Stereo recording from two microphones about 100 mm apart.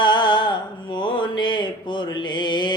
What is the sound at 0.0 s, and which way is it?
Mantra, 50° left (ahead or behind).